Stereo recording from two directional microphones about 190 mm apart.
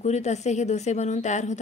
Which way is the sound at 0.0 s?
35° left (ahead or behind).